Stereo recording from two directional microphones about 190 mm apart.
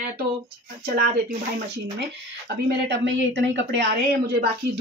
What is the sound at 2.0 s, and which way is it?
Speech, 65° right (ahead or behind).